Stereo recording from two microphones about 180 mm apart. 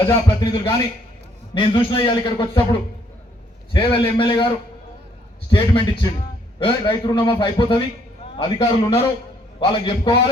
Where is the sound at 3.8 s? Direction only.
30° left (ahead or behind).